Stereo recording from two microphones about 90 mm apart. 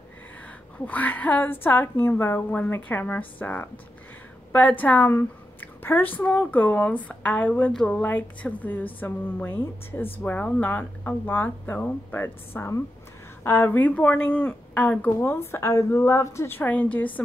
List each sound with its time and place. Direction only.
0.7 s a woman's voice: 20° left (ahead or behind)
15.2 s a woman's voice: 30° left (ahead or behind)
16.5 s a woman's voice: 20° left (ahead or behind)